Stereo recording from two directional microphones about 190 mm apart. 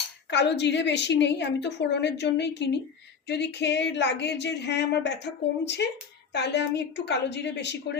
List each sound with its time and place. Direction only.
0.3 s speech: 65° left (ahead or behind)